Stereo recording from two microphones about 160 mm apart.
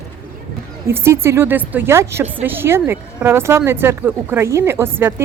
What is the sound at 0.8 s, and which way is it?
Speech, 15° right (ahead or behind).